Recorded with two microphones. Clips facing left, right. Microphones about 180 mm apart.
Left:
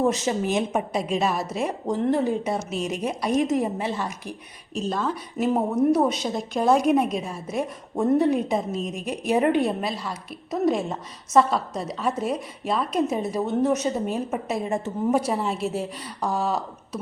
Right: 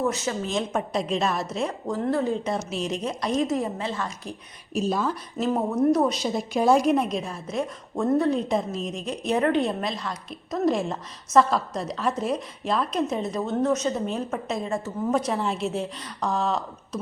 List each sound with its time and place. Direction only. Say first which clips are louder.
0.4 s a woman's voice: left 3 dB; 10° left (ahead or behind)
1.9 s a woman's voice: left 3 dB; 20° left (ahead or behind)
4.7 s speech: right 1 dB; 5° right (ahead or behind)
5.5 s a woman's voice: left 1 dB; 10° left (ahead or behind)
8.4 s a woman's voice: even; centre (ahead or behind)